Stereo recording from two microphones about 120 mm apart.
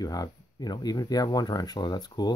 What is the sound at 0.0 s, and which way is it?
Speech, 30° left (ahead or behind).